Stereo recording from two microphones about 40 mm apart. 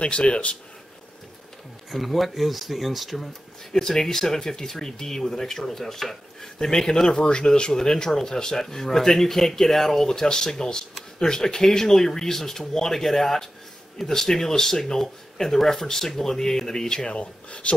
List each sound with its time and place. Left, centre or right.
0.0 s speech: left
1.9 s speech: centre
3.7 s speech: centre; by 17.7 s left